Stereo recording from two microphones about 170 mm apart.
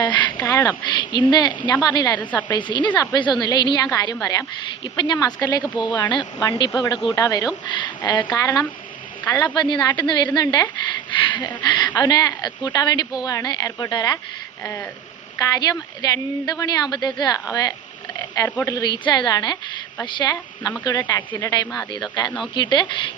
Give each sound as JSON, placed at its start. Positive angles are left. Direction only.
{"t": 0.0, "sound": "a sound", "side_deg": 25}
{"t": 0.9, "sound": "a woman's voice", "side_deg": 25}
{"t": 15.4, "sound": "a woman's voice", "side_deg": 20}
{"t": 18.4, "sound": "speech", "side_deg": 10}
{"t": 18.7, "sound": "a woman's voice", "side_deg": 25}